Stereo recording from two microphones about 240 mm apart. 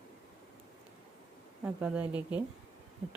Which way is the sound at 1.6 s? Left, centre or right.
Centre.